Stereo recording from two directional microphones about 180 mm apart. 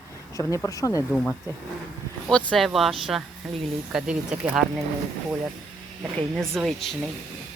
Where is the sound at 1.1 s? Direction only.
10° left (ahead or behind).